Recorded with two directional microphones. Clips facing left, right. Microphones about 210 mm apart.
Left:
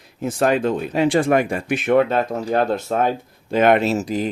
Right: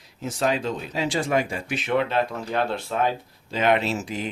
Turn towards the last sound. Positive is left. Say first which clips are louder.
# left 7 dB
turn(degrees=40)  # may be behind; listen again after turning